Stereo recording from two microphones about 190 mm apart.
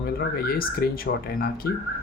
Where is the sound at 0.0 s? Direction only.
55° left (ahead or behind).